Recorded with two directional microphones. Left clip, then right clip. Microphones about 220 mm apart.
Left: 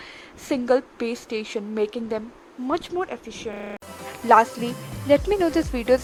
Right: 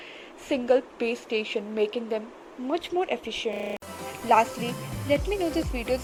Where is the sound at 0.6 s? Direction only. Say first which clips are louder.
Left 1 dB; 25° left (ahead or behind); by 5.5 s centre (ahead or behind).